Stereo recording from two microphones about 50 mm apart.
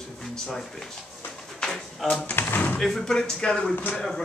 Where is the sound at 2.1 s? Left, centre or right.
Left.